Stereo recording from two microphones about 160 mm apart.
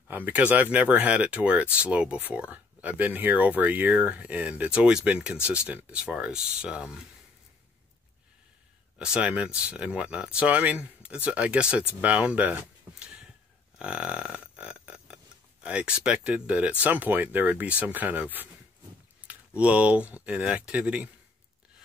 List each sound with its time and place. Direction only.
0.1 s speech: 10° right (ahead or behind)
8.9 s speech: 5° right (ahead or behind)
13.0 s a sound: 5° right (ahead or behind)
13.7 s burping: 5° right (ahead or behind)
15.6 s speech: 5° right (ahead or behind)